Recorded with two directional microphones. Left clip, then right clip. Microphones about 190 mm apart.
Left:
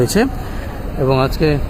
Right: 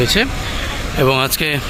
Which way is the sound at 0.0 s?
25° left (ahead or behind).